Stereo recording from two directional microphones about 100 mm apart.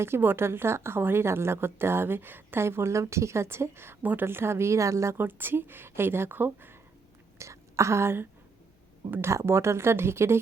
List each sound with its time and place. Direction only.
0.0 s a woman's voice: 25° right (ahead or behind)